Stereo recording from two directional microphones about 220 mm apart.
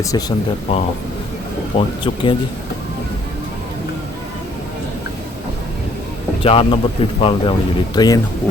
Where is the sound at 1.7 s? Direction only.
25° left (ahead or behind).